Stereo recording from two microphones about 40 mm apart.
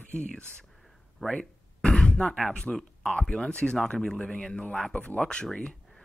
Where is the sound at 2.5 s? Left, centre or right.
Left.